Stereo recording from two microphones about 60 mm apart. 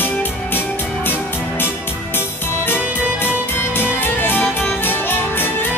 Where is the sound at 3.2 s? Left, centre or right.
Left.